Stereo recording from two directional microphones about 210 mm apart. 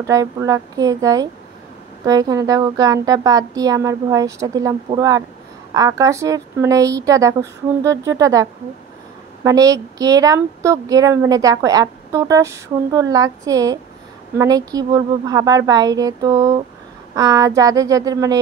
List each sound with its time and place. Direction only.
0.0 s a woman's voice: 15° right (ahead or behind)